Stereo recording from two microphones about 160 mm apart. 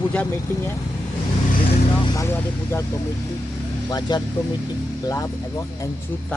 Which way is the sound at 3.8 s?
25° left (ahead or behind).